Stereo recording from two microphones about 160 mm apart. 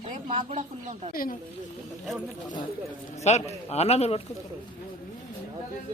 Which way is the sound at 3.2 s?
45° left (ahead or behind).